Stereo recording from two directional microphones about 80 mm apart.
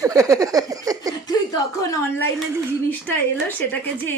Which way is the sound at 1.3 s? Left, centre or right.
Left.